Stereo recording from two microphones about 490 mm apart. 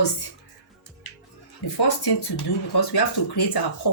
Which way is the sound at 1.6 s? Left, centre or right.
Left.